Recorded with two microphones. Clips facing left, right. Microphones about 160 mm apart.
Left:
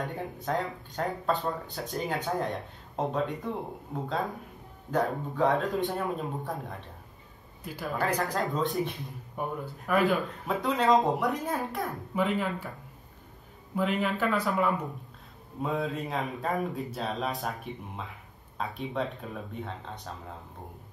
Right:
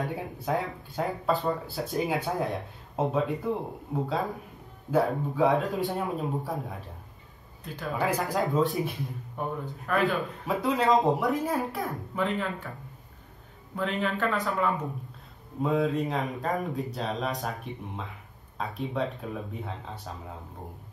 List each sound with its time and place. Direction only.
0.0 s speech: centre (ahead or behind)
9.4 s speech: 10° left (ahead or behind)
13.7 s speech: centre (ahead or behind)